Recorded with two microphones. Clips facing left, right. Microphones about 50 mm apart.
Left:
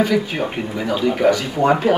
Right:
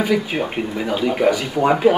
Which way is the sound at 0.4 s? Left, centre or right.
Centre.